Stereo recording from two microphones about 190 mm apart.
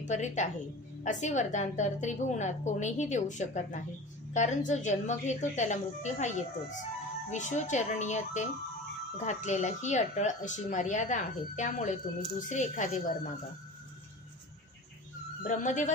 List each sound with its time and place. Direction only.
0.0 s a woman's voice: 40° left (ahead or behind)
15.4 s a woman's voice: 40° left (ahead or behind)